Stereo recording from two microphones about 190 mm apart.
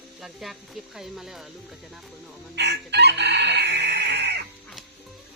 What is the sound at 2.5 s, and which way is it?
Chicken, 60° right (ahead or behind).